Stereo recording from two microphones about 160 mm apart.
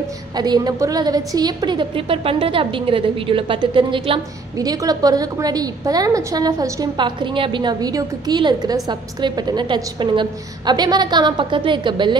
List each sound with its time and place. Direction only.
0.4 s a woman's voice: 25° right (ahead or behind)